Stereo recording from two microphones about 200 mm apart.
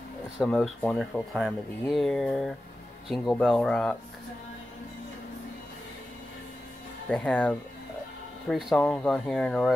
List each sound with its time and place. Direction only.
0.4 s speech: 5° left (ahead or behind)
7.1 s speech: 5° left (ahead or behind)